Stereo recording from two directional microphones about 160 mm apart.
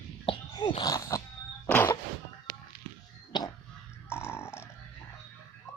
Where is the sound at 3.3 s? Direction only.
30° left (ahead or behind).